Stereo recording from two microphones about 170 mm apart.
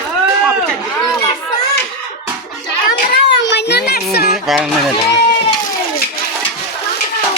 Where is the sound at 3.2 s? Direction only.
90° left; by 4.3 s 65° left (ahead or behind).